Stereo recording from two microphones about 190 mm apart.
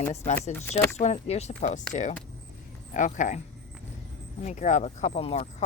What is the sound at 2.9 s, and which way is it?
Speech, 40° left (ahead or behind).